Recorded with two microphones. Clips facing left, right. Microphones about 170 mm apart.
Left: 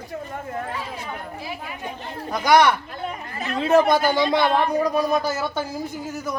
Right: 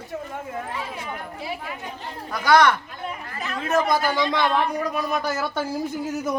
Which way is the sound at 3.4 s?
25° left (ahead or behind).